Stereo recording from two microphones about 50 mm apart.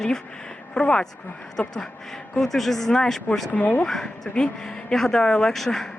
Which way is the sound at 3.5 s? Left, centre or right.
Left.